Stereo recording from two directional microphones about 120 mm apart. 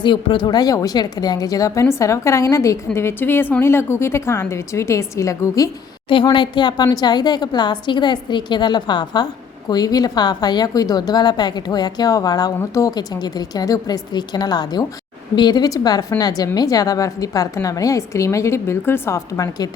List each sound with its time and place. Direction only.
0.0 s a woman's voice: 45° left (ahead or behind); by 5.7 s 30° left (ahead or behind)
6.2 s a woman's voice: 40° left (ahead or behind)